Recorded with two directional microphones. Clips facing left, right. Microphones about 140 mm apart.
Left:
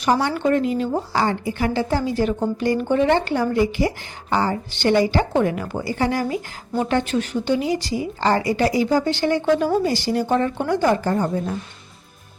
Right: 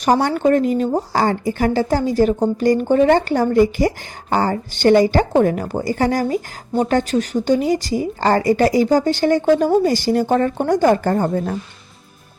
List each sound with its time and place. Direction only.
0.0 s a woman's voice: 45° right (ahead or behind)